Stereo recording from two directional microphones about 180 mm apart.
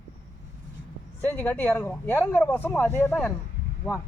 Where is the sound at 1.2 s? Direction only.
10° left (ahead or behind).